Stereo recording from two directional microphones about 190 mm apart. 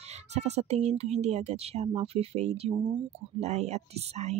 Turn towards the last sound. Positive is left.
turn(degrees=-35)  # may be behind; listen again after turning